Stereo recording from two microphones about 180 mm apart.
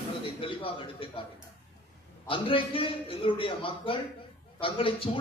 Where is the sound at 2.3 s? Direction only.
30° left (ahead or behind).